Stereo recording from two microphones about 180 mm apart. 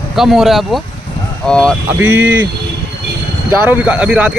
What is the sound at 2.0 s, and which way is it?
Speech, 10° right (ahead or behind).